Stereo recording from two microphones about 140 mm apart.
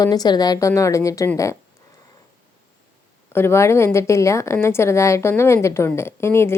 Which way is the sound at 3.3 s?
20° left (ahead or behind).